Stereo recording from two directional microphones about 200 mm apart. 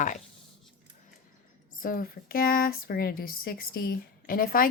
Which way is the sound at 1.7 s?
45° left (ahead or behind).